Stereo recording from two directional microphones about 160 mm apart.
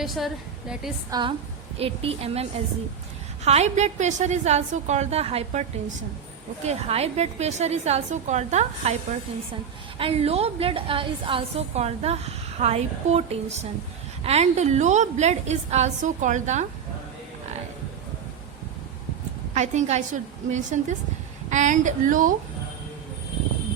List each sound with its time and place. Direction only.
0.0 s a woman's voice: centre (ahead or behind)
1.1 s a woman's voice: 30° right (ahead or behind)
6.7 s a woman's voice: 40° right (ahead or behind)
10.0 s a woman's voice: 40° right (ahead or behind)
19.5 s a woman's voice: 45° right (ahead or behind)